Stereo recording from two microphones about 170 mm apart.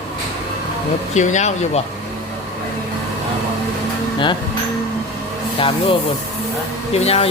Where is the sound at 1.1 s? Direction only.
45° left (ahead or behind).